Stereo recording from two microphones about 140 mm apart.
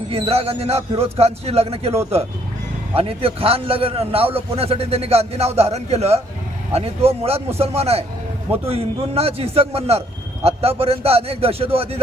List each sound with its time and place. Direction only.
0.1 s a man's voice: 45° right (ahead or behind)